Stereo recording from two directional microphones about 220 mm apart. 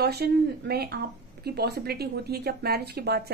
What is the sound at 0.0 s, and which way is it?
Speech, 45° right (ahead or behind).